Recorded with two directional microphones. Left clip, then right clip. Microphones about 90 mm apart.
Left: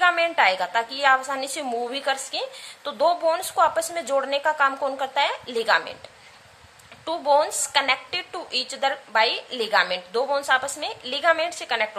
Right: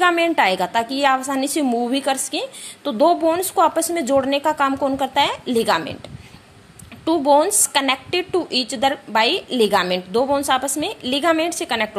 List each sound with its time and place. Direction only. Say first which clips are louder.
0.0 s a woman's voice: right 3 dB; 35° right (ahead or behind)
7.1 s a woman's voice: right 5 dB; 35° right (ahead or behind)